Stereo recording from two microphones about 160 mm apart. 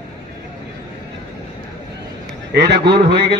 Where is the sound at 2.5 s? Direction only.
90° right.